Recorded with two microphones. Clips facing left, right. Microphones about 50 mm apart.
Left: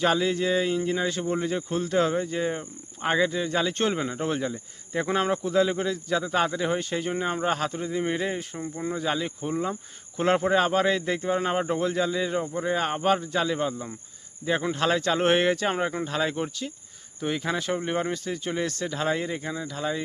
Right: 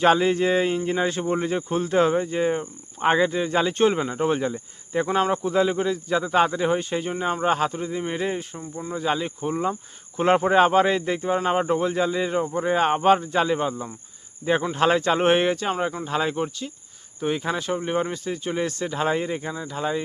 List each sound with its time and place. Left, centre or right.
0.0 s speech: right
3.8 s speech: centre
5.0 s speech: centre
5.4 s speech: centre
12.7 s speech: right